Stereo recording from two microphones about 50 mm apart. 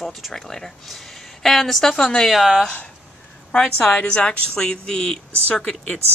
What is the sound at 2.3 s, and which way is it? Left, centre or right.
Speech, centre.